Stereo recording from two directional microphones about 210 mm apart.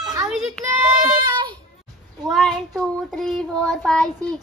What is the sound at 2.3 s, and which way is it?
Child singing, centre (ahead or behind).